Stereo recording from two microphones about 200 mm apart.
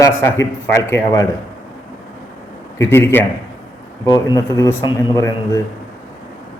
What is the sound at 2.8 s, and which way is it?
A man's voice, 10° left (ahead or behind).